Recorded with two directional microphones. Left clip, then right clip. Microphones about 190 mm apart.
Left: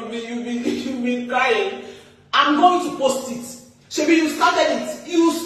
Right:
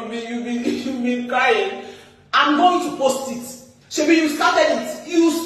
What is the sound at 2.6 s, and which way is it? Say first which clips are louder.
Speech: even; centre (ahead or behind).